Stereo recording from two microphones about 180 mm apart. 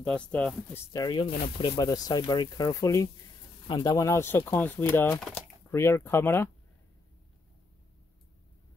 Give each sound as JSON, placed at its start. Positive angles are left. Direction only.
{"t": 0.0, "sound": "speech", "side_deg": 5}
{"t": 0.9, "sound": "speech", "side_deg": 25}